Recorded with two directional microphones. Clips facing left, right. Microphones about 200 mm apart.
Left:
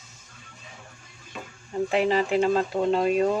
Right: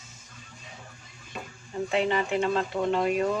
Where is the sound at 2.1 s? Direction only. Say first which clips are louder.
Left 4 dB; 35° left (ahead or behind).